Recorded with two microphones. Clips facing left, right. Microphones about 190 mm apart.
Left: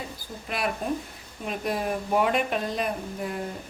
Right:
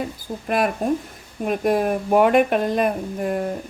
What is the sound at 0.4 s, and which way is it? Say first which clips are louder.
Speech: right 8 dB; 50° right (ahead or behind).